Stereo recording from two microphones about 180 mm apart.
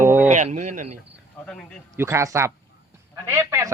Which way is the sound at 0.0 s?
10° right (ahead or behind).